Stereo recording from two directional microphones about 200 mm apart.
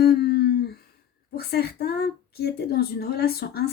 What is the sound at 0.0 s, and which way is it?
Humming, 50° left (ahead or behind).